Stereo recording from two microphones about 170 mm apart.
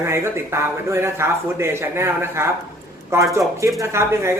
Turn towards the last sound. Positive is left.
turn(degrees=-15)  # may be behind; listen again after turning